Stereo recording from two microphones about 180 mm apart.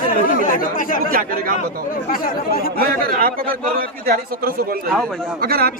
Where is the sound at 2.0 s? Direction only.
55° left (ahead or behind).